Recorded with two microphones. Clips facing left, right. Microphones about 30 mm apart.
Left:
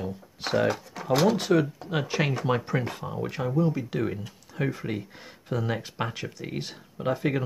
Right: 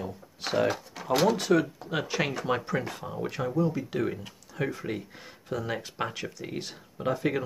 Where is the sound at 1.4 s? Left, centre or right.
Centre.